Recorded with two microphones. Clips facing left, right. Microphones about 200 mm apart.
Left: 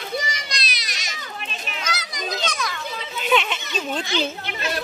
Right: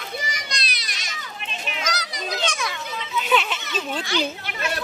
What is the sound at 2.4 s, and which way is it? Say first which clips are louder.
Children playing: even; 25° right (ahead or behind).